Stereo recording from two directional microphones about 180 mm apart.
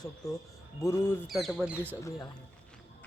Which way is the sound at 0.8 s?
15° left (ahead or behind).